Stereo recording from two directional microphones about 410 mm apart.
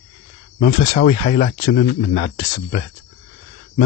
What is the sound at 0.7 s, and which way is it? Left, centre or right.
Speech, centre.